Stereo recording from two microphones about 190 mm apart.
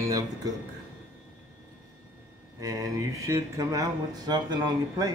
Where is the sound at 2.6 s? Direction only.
15° right (ahead or behind).